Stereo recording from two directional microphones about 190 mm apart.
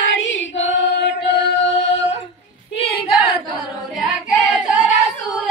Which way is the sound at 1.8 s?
35° left (ahead or behind).